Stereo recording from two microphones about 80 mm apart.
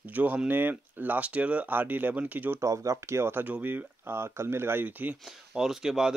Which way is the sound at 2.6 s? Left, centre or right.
Right.